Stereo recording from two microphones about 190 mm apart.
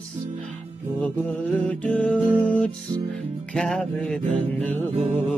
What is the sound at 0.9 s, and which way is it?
Music, 5° left (ahead or behind).